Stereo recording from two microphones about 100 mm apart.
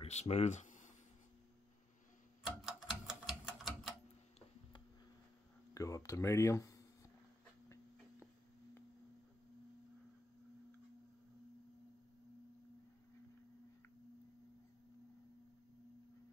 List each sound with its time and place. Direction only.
0.0 s speech: 90° left
2.4 s typewriter: 5° right (ahead or behind)
5.8 s speech: 35° left (ahead or behind)